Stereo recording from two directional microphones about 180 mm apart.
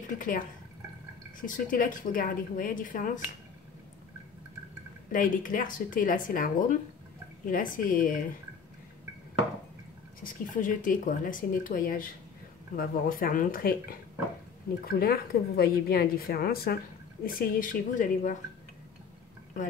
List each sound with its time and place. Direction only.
0.2 s speech: 50° left (ahead or behind)
5.1 s speech: 50° left (ahead or behind)
10.2 s a woman's voice: 45° left (ahead or behind)